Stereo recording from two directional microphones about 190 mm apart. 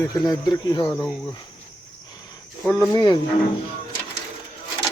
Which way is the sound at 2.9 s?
25° left (ahead or behind).